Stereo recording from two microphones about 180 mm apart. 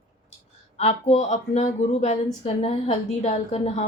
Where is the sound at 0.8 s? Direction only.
35° left (ahead or behind).